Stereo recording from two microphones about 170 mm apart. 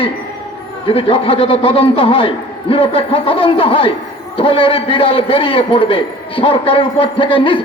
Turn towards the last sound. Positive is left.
turn(degrees=30)  # may be behind; listen again after turning